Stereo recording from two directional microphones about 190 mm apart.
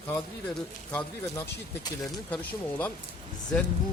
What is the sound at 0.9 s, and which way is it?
Speech, 15° left (ahead or behind).